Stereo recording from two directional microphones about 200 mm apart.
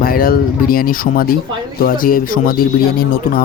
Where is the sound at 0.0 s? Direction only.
45° left (ahead or behind).